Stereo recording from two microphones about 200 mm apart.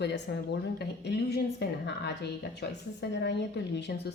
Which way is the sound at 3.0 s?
60° left (ahead or behind).